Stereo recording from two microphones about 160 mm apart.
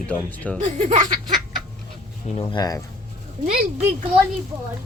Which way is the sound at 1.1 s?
30° right (ahead or behind).